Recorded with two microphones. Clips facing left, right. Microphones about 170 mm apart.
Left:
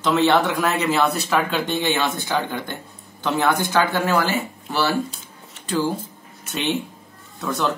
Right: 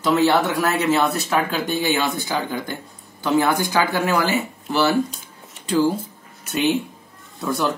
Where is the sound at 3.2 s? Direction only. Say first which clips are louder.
Right 2 dB; 5° right (ahead or behind).